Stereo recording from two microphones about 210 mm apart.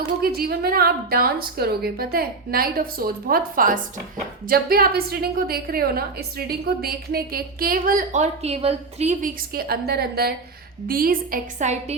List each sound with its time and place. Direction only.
0.2 s a woman's voice: 45° right (ahead or behind)